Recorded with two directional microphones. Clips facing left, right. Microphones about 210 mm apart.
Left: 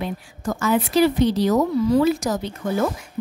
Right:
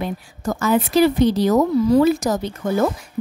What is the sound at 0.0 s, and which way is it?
A woman's voice, 40° right (ahead or behind).